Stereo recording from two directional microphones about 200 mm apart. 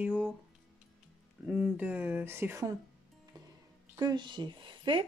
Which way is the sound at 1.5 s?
5° right (ahead or behind).